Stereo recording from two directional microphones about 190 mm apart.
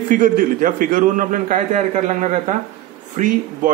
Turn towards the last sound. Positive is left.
turn(degrees=-40)  # may be behind; listen again after turning